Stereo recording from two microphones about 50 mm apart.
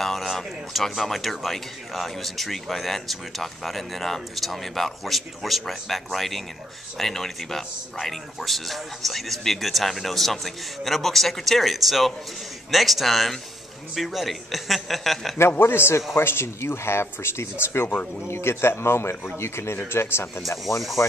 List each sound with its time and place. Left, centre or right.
0.0 s speech: centre
15.6 s speech: left